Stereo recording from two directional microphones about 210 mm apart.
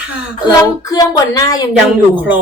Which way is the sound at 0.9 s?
15° left (ahead or behind).